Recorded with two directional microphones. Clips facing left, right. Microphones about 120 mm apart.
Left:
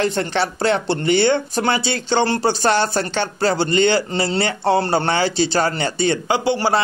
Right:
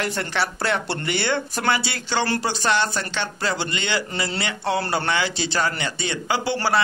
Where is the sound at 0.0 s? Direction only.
30° left (ahead or behind).